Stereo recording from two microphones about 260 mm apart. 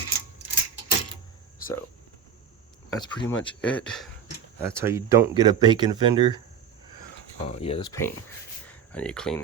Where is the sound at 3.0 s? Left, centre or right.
Centre.